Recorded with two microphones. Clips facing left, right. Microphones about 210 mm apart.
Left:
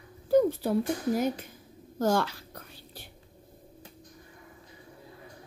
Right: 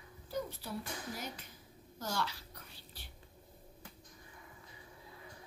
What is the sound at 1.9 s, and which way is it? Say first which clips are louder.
Whispering: left 13 dB; 50° left (ahead or behind).